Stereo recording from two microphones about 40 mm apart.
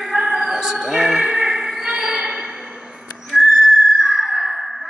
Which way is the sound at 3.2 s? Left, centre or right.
Centre.